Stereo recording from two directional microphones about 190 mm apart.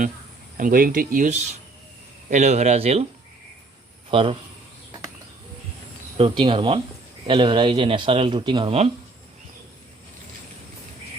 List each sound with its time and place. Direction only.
0.5 s speech: 45° right (ahead or behind)
4.1 s speech: 30° right (ahead or behind)
6.1 s speech: 25° right (ahead or behind)